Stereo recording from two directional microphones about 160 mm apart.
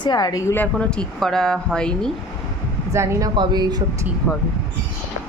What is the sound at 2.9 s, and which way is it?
Speech, 20° right (ahead or behind).